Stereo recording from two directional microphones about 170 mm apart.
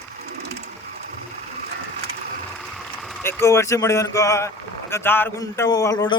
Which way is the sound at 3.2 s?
15° left (ahead or behind).